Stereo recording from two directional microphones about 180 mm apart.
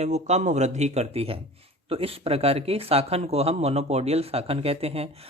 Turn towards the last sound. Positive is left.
turn(degrees=-35)  # may be behind; listen again after turning